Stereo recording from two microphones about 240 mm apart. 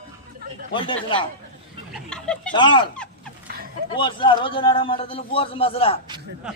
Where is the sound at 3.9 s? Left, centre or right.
Centre.